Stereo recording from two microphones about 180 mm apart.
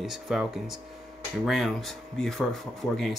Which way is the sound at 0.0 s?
Centre (ahead or behind).